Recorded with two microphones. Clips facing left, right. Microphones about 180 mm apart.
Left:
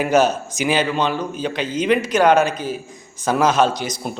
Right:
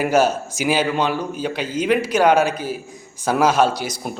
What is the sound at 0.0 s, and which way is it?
A man's voice, 10° right (ahead or behind).